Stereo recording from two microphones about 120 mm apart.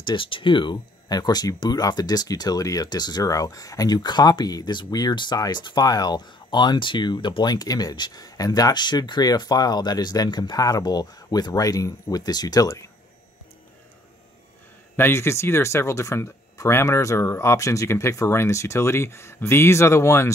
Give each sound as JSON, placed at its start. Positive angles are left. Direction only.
{"t": 0.0, "sound": "speech", "side_deg": 45}
{"t": 15.0, "sound": "speech", "side_deg": 20}